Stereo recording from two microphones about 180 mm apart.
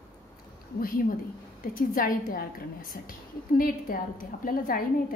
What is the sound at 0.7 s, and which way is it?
A woman's voice, 55° left (ahead or behind).